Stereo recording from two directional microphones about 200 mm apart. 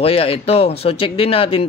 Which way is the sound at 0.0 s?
30° left (ahead or behind).